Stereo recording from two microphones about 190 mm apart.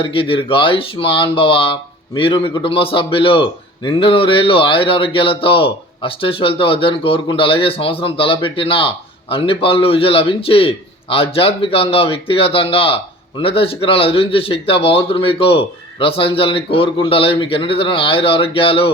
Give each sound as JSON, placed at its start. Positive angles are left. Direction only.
{"t": 0.0, "sound": "a man's voice", "side_deg": 30}